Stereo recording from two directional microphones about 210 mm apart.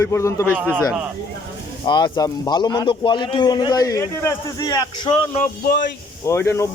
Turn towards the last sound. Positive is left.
turn(degrees=10)  # may be behind; listen again after turning